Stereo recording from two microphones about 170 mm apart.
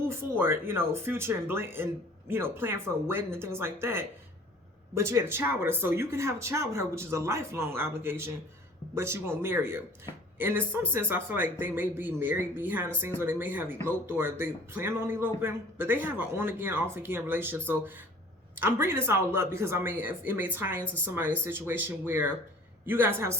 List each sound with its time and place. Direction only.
0.1 s speech: 15° right (ahead or behind)